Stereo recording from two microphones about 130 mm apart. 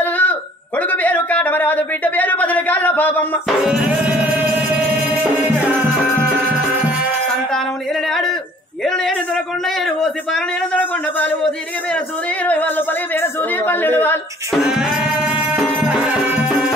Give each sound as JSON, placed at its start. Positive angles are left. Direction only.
{"t": 0.0, "sound": "a sound", "side_deg": 10}
{"t": 3.4, "sound": "music", "side_deg": -5}
{"t": 8.8, "sound": "a sound", "side_deg": 5}
{"t": 9.8, "sound": "a man's voice", "side_deg": 5}
{"t": 12.4, "sound": "speech", "side_deg": 15}
{"t": 14.5, "sound": "music", "side_deg": -5}